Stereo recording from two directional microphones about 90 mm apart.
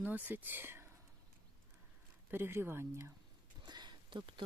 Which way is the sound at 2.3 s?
25° right (ahead or behind).